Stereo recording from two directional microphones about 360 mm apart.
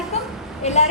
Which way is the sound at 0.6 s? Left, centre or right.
Centre.